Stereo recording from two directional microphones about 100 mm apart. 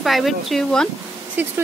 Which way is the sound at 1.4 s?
20° right (ahead or behind).